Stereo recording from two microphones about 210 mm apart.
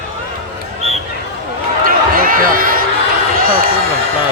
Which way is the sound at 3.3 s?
45° right (ahead or behind).